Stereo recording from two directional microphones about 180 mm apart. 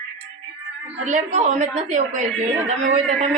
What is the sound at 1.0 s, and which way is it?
A woman's voice, 40° right (ahead or behind).